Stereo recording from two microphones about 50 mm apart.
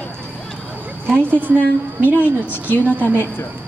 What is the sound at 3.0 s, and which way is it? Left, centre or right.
Speech, left.